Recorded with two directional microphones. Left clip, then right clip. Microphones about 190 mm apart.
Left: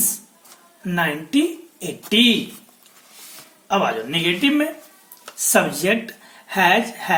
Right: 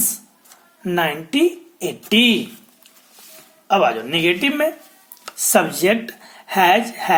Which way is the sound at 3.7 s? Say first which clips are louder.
Right 4 dB; 35° right (ahead or behind).